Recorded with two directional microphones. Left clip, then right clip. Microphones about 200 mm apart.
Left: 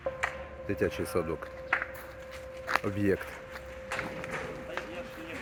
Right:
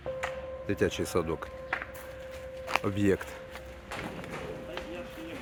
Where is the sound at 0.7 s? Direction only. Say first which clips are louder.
Right 1 dB; 15° right (ahead or behind).